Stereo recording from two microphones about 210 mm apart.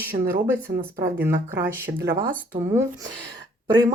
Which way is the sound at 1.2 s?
10° right (ahead or behind).